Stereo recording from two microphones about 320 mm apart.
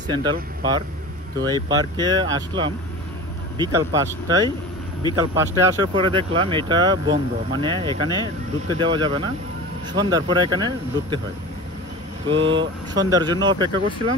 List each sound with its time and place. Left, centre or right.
0.1 s speech: centre
2.0 s speech: centre
12.4 s speech: right
12.9 s speech: centre